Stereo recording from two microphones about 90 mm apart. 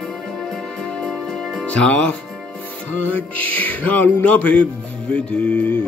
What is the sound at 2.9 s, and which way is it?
Music, 15° left (ahead or behind).